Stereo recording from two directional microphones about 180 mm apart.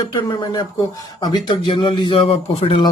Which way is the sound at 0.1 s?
20° left (ahead or behind).